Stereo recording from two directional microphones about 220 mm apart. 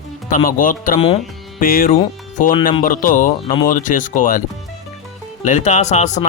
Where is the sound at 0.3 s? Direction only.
35° left (ahead or behind).